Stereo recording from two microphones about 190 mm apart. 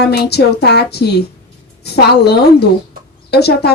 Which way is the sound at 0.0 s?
60° left (ahead or behind).